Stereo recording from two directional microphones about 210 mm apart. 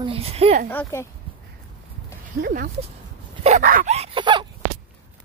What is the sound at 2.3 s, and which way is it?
Speech, 45° right (ahead or behind).